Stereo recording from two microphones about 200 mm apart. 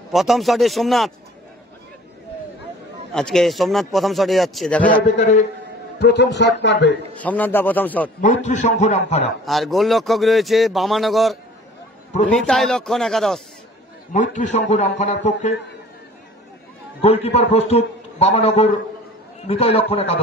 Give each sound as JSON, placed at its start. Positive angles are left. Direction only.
{"t": 0.1, "sound": "speech", "side_deg": 0}
{"t": 3.1, "sound": "speech", "side_deg": 0}
{"t": 5.9, "sound": "a man's voice", "side_deg": 55}
{"t": 7.2, "sound": "a man's voice", "side_deg": 10}
{"t": 8.5, "sound": "a man's voice", "side_deg": 35}
{"t": 9.5, "sound": "speech", "side_deg": 0}
{"t": 14.1, "sound": "a man's voice", "side_deg": 40}
{"t": 17.0, "sound": "a man's voice", "side_deg": 30}